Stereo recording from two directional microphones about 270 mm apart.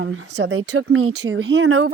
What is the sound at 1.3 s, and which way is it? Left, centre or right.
Speech, right.